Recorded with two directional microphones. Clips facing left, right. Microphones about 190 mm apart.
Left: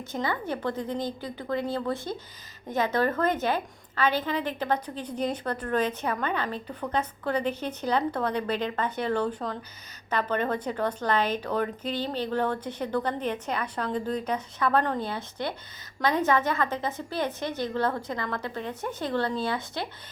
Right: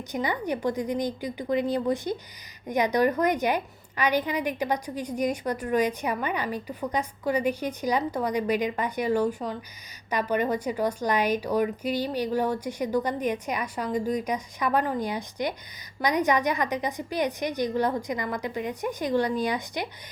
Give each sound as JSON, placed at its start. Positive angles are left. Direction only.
{"t": 0.1, "sound": "a woman's voice", "side_deg": -15}